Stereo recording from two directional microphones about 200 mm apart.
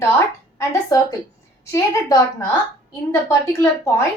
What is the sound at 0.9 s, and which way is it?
A woman's voice, 15° left (ahead or behind).